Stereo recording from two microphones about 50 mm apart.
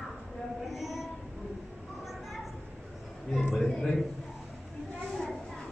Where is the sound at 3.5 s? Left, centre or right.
Centre.